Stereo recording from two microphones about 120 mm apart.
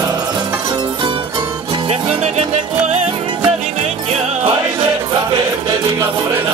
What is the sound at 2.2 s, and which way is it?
Music, 65° right (ahead or behind).